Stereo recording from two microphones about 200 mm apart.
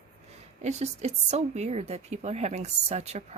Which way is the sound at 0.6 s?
35° right (ahead or behind).